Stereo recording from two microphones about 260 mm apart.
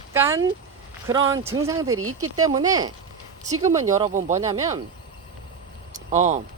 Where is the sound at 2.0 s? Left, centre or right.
Right.